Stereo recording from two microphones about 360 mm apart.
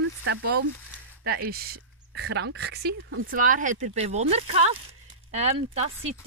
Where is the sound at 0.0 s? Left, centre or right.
Right.